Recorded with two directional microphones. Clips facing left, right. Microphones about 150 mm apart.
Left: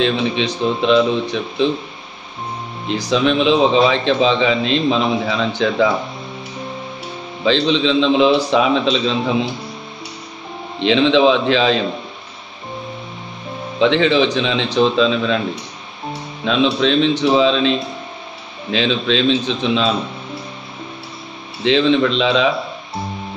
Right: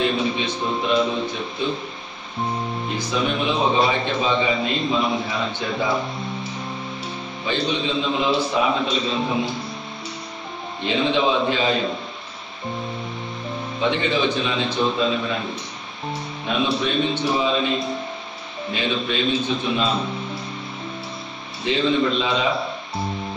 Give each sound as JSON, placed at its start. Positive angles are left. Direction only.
{"t": 0.0, "sound": "a man's voice", "side_deg": 90}
{"t": 3.1, "sound": "a man's voice", "side_deg": 90}
{"t": 7.4, "sound": "a man's voice", "side_deg": 90}
{"t": 10.8, "sound": "a man's voice", "side_deg": 90}
{"t": 13.7, "sound": "a man's voice", "side_deg": 90}
{"t": 16.4, "sound": "a man's voice", "side_deg": 90}
{"t": 21.6, "sound": "a man's voice", "side_deg": 90}